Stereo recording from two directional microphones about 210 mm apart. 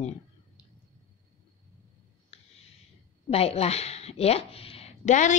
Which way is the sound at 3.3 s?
30° left (ahead or behind).